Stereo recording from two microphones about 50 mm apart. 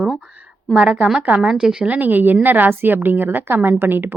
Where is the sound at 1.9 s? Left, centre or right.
Right.